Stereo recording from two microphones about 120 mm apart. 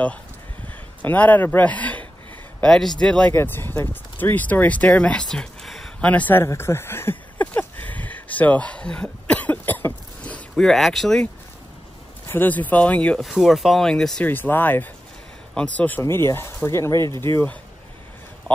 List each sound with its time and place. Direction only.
1.0 s speech: 15° left (ahead or behind)
12.3 s speech: 15° left (ahead or behind)
13.2 s speech: centre (ahead or behind)
14.3 s speech: 15° left (ahead or behind)